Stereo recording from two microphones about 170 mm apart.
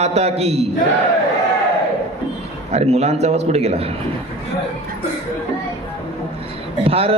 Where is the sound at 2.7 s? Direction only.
40° right (ahead or behind).